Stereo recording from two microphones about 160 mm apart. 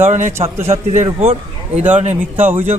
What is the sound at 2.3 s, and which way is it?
Speech, 15° right (ahead or behind).